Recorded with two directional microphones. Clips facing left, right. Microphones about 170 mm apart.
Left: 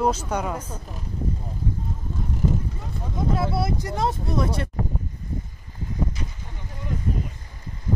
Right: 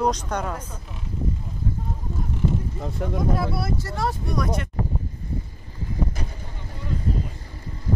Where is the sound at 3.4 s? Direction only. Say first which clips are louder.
Left 1 dB; 20° left (ahead or behind).